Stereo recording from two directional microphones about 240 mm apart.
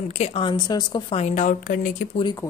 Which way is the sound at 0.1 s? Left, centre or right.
Left.